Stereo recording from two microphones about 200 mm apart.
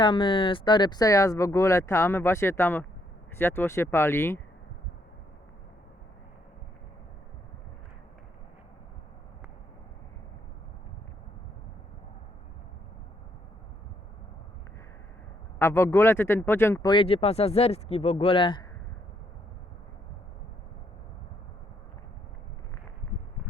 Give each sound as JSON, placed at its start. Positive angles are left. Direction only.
{"t": 0.0, "sound": "speech", "side_deg": 25}
{"t": 15.5, "sound": "speech", "side_deg": 15}
{"t": 16.9, "sound": "speech", "side_deg": 25}